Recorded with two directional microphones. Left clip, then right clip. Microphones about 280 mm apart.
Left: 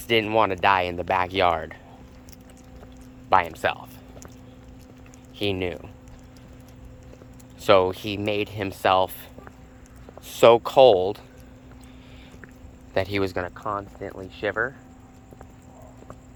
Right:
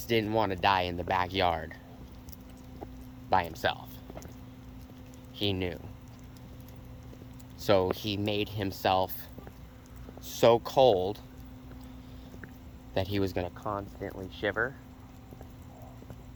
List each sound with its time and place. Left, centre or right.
0.1 s speech: centre
3.2 s speech: centre
5.4 s speech: centre
7.6 s speech: centre
10.2 s speech: centre
12.9 s speech: centre
13.6 s speech: left